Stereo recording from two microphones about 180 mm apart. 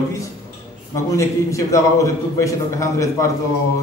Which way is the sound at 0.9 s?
15° left (ahead or behind).